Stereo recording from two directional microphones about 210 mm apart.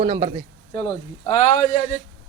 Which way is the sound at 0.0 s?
20° right (ahead or behind).